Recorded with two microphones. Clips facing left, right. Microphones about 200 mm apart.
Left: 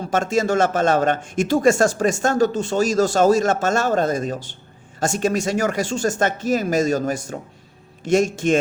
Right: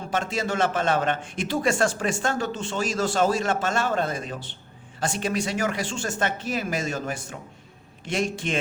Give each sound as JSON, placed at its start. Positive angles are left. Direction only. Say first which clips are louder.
{"t": 0.1, "sound": "a man's voice", "louder": "left 8 dB", "side_deg": 45}